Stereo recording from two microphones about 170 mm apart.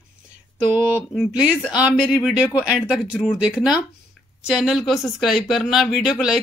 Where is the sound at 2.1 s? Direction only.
5° right (ahead or behind).